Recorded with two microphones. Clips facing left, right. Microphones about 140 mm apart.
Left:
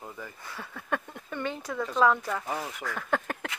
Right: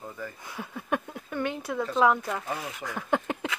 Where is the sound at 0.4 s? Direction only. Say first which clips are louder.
Right 3 dB; 15° right (ahead or behind).